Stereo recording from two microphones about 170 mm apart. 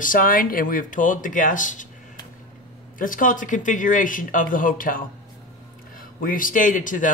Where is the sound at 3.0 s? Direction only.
50° left (ahead or behind).